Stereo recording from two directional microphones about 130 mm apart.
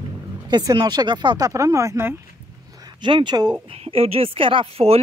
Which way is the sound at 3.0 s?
40° right (ahead or behind).